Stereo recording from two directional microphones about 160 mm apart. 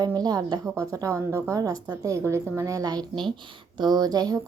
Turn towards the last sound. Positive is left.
turn(degrees=-25)  # may be behind; listen again after turning